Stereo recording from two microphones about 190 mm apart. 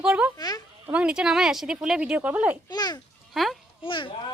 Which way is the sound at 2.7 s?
20° left (ahead or behind).